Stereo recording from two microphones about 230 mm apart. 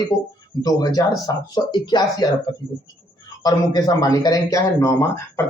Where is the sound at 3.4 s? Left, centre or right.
Centre.